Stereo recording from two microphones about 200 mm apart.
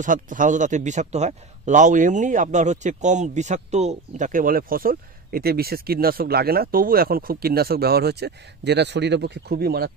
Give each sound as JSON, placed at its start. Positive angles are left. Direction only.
{"t": 0.0, "sound": "a man's voice", "side_deg": -40}